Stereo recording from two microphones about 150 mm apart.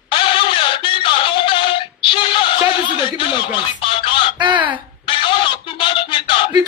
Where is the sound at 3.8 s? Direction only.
35° left (ahead or behind).